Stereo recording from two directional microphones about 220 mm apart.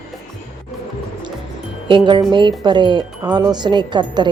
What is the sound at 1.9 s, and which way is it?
Speech, 20° right (ahead or behind).